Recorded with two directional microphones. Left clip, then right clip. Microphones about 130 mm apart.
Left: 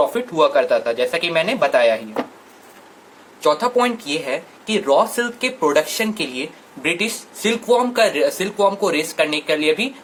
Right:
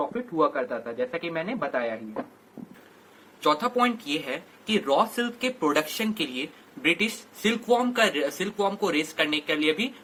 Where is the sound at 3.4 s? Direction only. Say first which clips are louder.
Left 7 dB; 35° left (ahead or behind).